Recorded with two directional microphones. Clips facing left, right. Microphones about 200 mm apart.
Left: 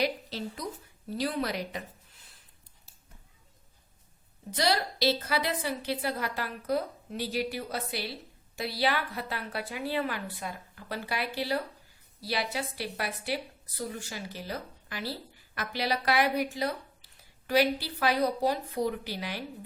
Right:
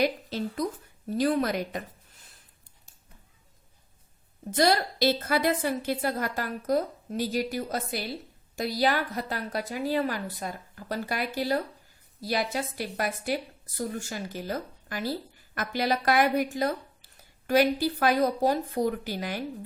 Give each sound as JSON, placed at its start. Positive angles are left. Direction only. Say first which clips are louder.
{"t": 0.0, "sound": "speech", "louder": "right 4 dB", "side_deg": -50}
{"t": 4.5, "sound": "speech", "louder": "right 5 dB", "side_deg": -50}